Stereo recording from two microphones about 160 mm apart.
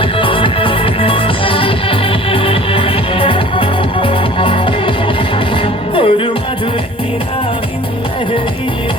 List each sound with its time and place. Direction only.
0.0 s music: 35° left (ahead or behind)
5.9 s music: 35° left (ahead or behind)